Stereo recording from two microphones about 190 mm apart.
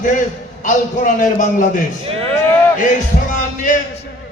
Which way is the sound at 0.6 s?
45° left (ahead or behind).